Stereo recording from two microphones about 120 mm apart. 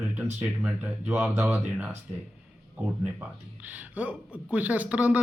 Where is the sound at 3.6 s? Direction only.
15° right (ahead or behind).